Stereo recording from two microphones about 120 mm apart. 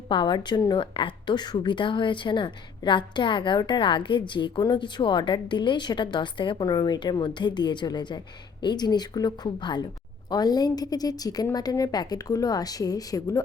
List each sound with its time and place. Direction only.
0.1 s a woman's voice: 40° left (ahead or behind)